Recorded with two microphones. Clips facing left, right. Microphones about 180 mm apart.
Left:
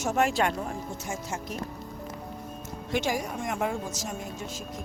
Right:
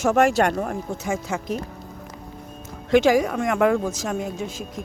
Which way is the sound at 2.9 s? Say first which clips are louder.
Right 12 dB; 90° right.